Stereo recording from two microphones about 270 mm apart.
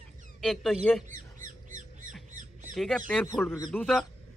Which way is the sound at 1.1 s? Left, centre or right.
Right.